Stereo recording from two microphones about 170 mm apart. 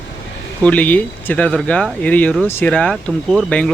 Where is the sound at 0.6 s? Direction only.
10° left (ahead or behind).